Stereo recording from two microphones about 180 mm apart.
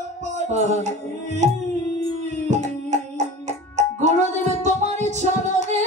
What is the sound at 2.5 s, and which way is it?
Hands, 40° right (ahead or behind).